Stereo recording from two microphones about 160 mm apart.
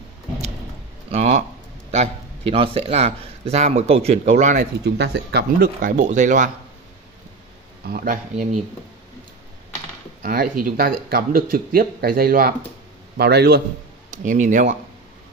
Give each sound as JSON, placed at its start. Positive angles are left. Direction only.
{"t": 1.1, "sound": "a sound", "side_deg": -45}
{"t": 1.9, "sound": "a man's voice", "side_deg": -40}
{"t": 4.8, "sound": "speech", "side_deg": -90}
{"t": 7.8, "sound": "speech", "side_deg": -70}
{"t": 10.2, "sound": "speech", "side_deg": -65}
{"t": 13.2, "sound": "a man's voice", "side_deg": -90}
{"t": 14.1, "sound": "speech", "side_deg": -50}